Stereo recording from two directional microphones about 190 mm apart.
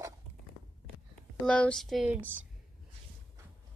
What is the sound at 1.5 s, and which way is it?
Speech, 5° left (ahead or behind).